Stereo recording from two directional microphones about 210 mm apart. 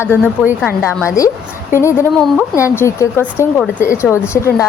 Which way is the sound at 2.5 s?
15° left (ahead or behind).